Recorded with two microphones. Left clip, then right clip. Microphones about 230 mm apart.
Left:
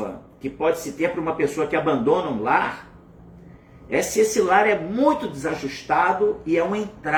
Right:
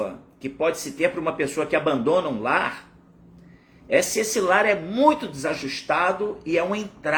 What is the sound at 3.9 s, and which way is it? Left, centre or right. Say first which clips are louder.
Speech: left 2 dB; centre.